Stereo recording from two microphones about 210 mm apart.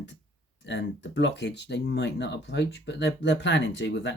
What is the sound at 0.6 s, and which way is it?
Speech, 55° left (ahead or behind).